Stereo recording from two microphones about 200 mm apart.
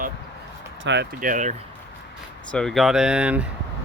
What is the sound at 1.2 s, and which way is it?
Speech, 40° right (ahead or behind).